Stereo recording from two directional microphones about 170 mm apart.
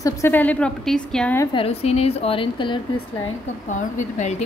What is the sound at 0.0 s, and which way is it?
A woman's voice, 15° left (ahead or behind).